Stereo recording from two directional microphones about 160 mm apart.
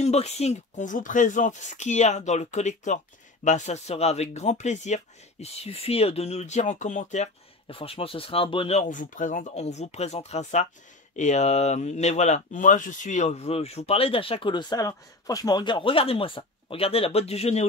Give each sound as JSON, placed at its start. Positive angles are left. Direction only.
{"t": 0.0, "sound": "speech", "side_deg": 45}
{"t": 7.6, "sound": "speech", "side_deg": 35}